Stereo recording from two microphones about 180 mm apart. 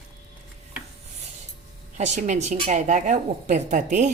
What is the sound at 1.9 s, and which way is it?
Speech, 40° right (ahead or behind).